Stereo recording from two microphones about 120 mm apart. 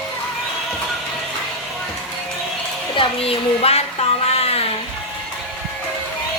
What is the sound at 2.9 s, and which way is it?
Speech, 50° left (ahead or behind).